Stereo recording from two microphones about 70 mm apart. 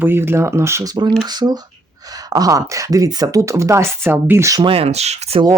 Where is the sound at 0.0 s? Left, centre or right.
Right.